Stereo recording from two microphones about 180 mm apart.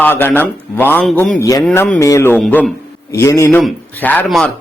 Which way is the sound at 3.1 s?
15° left (ahead or behind).